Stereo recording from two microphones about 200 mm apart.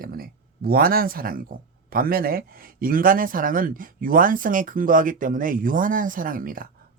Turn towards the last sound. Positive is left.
turn(degrees=-45)  # may be behind; listen again after turning